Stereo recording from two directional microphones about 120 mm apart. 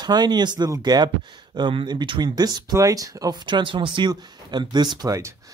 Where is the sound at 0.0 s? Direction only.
35° right (ahead or behind).